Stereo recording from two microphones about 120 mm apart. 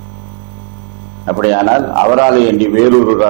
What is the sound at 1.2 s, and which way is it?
A man's voice, 20° right (ahead or behind).